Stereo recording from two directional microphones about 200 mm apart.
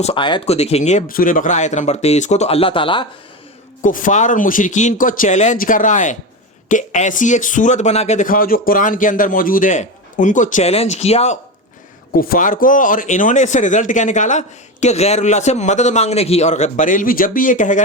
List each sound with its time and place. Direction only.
0.0 s speech: 25° left (ahead or behind)
3.8 s speech: 40° left (ahead or behind)
12.1 s speech: 45° left (ahead or behind)